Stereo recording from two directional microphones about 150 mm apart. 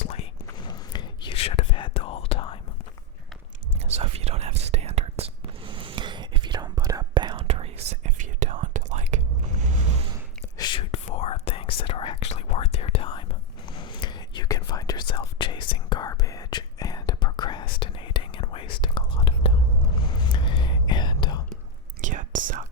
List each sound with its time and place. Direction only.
0.0 s whispering: 45° left (ahead or behind)
0.6 s whispering: 30° left (ahead or behind)
3.8 s whispering: 45° right (ahead or behind)
7.4 s whispering: 45° right (ahead or behind)
10.6 s whispering: 35° left (ahead or behind)
22.0 s whispering: 60° right (ahead or behind)